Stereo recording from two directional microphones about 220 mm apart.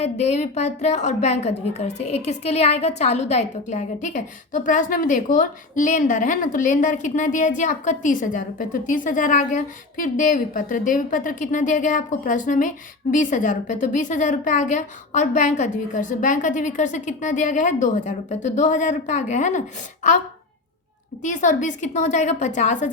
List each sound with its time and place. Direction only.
0.0 s a woman's voice: 30° left (ahead or behind)
21.2 s a woman's voice: 35° left (ahead or behind)